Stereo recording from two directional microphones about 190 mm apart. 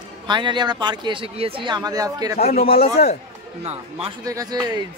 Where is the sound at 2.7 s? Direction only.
30° left (ahead or behind).